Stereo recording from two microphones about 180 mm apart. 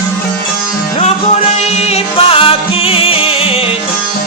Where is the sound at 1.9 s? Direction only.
30° left (ahead or behind).